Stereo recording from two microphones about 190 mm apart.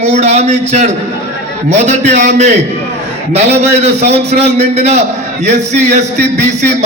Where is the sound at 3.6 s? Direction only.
35° right (ahead or behind).